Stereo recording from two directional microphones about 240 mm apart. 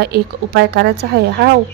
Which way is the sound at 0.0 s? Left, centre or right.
Right.